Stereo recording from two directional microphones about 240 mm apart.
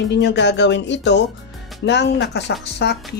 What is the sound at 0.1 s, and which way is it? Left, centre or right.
Speech, left.